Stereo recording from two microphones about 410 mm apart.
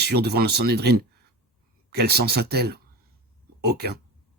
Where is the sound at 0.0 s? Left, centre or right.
Right.